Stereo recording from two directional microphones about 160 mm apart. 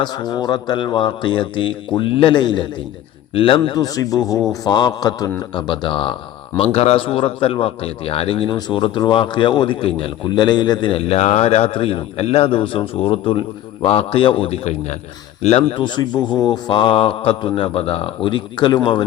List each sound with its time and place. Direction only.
0.0 s a man's voice: 25° left (ahead or behind)